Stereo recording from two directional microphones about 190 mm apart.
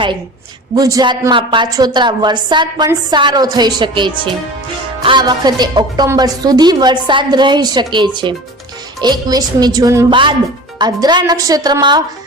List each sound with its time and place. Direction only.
0.8 s a woman's voice: 20° right (ahead or behind)